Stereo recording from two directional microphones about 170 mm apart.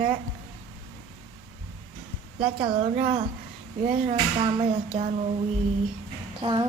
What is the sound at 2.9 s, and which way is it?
Speech, 45° right (ahead or behind).